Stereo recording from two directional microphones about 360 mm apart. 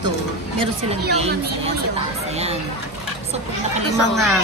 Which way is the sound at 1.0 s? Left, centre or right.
Right.